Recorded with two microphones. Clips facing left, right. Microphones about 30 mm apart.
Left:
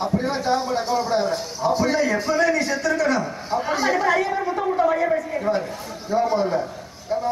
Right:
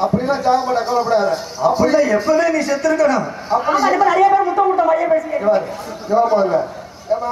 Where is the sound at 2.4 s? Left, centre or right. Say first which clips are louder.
Right 3 dB; centre.